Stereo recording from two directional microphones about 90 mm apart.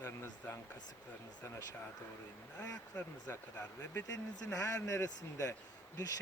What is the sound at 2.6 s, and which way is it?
Speech, 40° left (ahead or behind).